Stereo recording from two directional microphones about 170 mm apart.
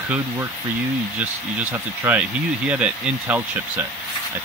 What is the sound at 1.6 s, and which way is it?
Speech, 10° right (ahead or behind).